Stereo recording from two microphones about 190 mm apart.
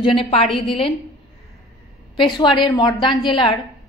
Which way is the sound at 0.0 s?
30° left (ahead or behind).